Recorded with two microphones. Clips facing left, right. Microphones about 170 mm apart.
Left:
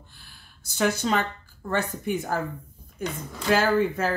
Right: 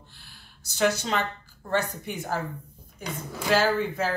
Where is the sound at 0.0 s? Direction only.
50° left (ahead or behind).